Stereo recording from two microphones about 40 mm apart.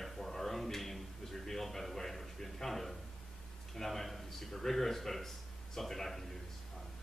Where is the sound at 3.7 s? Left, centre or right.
Centre.